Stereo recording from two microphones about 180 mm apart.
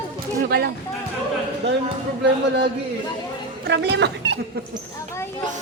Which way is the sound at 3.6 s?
65° right (ahead or behind).